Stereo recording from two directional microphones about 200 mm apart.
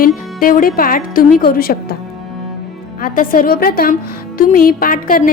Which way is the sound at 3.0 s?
45° left (ahead or behind).